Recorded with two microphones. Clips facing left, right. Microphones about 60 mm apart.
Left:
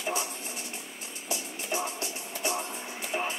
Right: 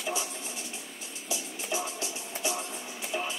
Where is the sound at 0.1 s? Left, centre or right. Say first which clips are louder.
Left 1 dB; left.